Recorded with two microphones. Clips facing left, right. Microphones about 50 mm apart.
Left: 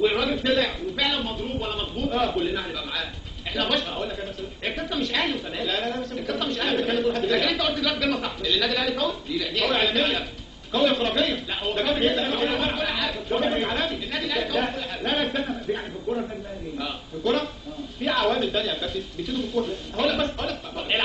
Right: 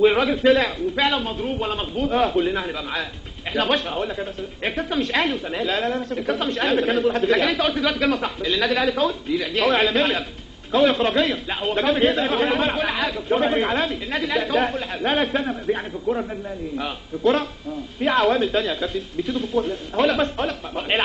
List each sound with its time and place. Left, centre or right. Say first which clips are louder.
0.0 s a woman's voice: right 6 dB; right
3.9 s a man's voice: right 4 dB; right
4.7 s a woman's voice: right 5 dB; right